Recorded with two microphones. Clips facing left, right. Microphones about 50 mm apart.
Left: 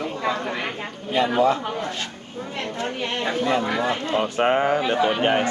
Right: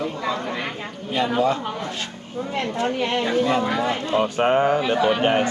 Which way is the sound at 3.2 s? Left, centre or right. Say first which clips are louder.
Even; centre.